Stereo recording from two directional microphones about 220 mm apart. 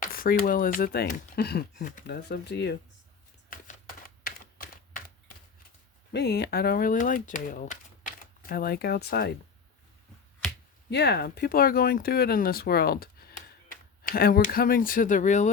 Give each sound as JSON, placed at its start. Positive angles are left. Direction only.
{"t": 0.0, "sound": "speech", "side_deg": 40}
{"t": 3.5, "sound": "typewriter", "side_deg": 40}
{"t": 6.1, "sound": "speech", "side_deg": 50}
{"t": 10.8, "sound": "speech", "side_deg": 50}